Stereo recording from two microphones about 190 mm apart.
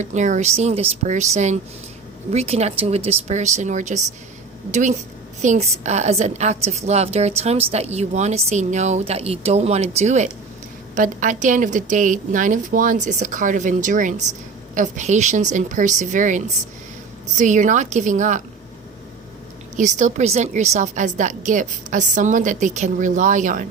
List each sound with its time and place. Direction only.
0.0 s a woman's voice: 40° right (ahead or behind)
19.7 s a woman's voice: 40° right (ahead or behind)